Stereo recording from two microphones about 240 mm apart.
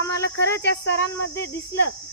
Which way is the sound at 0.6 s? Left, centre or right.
Left.